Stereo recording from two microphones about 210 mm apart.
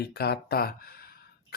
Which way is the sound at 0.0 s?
50° left (ahead or behind).